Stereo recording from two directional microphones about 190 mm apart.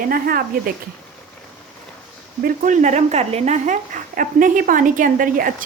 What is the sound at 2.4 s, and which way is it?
Speech, 40° right (ahead or behind).